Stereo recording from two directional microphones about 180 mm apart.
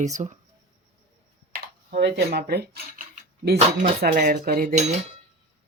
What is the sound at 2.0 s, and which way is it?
Speech, 65° right (ahead or behind).